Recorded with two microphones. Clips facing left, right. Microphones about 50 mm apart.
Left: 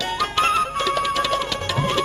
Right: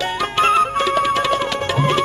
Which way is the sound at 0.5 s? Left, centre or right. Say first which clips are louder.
Right 5 dB; right.